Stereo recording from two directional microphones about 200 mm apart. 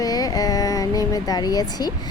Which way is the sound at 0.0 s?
20° left (ahead or behind).